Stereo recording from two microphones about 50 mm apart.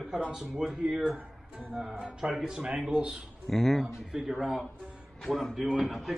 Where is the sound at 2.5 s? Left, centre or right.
Centre.